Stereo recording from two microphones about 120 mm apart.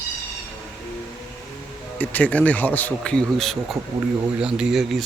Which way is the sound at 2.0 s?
10° left (ahead or behind).